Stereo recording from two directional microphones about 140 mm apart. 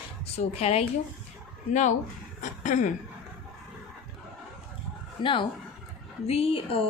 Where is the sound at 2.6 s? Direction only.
60° left (ahead or behind).